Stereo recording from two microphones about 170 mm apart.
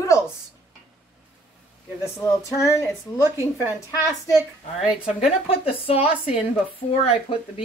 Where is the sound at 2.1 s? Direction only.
15° left (ahead or behind).